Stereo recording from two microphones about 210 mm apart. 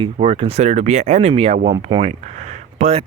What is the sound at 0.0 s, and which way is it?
Speech, 25° right (ahead or behind).